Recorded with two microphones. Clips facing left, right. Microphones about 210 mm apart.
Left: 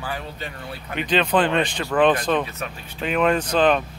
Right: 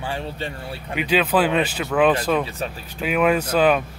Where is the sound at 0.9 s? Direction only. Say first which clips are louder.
Right 1 dB; 5° right (ahead or behind).